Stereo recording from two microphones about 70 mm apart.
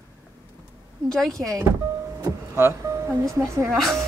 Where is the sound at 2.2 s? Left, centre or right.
Right.